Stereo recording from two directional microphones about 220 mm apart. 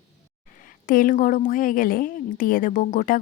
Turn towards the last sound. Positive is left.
turn(degrees=35)  # may be behind; listen again after turning